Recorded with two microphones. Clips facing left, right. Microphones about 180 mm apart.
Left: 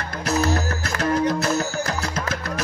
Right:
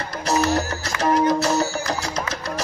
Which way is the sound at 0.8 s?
55° left (ahead or behind).